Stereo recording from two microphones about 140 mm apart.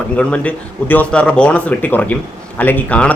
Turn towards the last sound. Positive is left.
turn(degrees=10)  # may be behind; listen again after turning